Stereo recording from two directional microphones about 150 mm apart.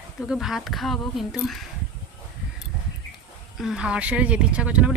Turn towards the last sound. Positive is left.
turn(degrees=-10)  # may be behind; listen again after turning